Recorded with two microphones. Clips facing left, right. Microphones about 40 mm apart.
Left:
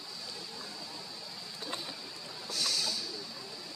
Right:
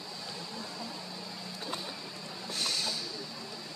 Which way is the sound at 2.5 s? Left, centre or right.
Right.